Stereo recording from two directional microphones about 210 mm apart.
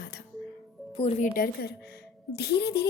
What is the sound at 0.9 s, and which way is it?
Speech, 30° left (ahead or behind).